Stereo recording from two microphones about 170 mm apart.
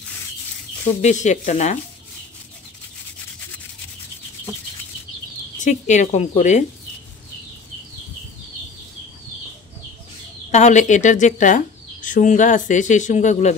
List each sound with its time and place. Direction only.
0.8 s speech: 45° left (ahead or behind)
5.6 s speech: 45° left (ahead or behind)
10.5 s speech: 45° left (ahead or behind)